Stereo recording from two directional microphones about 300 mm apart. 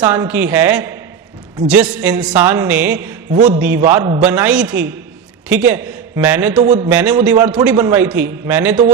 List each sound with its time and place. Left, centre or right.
0.0 s a man's voice: centre
3.3 s a man's voice: right
3.8 s a man's voice: centre
6.6 s a man's voice: centre
6.8 s a man's voice: centre